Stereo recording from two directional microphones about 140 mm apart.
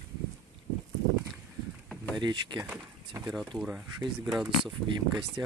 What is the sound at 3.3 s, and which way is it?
Speech, 5° right (ahead or behind).